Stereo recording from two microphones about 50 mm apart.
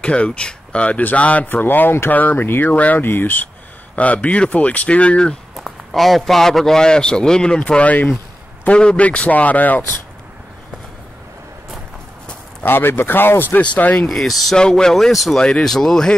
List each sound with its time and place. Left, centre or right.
0.0 s speech: left
1.5 s speech: left
2.3 s speech: left
2.6 s speech: left
3.0 s speech: left
3.9 s speech: left
5.6 s a man's voice: centre
7.6 s speech: left
12.6 s speech: left
13.6 s speech: left
14.0 s speech: centre
14.6 s a man's voice: centre